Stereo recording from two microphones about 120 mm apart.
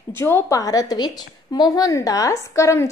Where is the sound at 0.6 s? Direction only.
30° left (ahead or behind).